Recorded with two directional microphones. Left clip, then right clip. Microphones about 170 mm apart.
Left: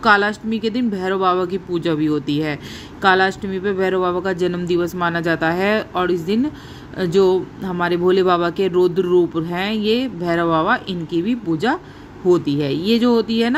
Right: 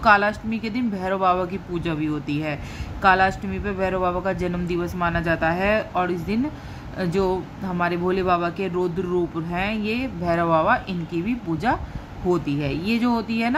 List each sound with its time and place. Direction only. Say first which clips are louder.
0.0 s speech: left 2 dB; 20° left (ahead or behind)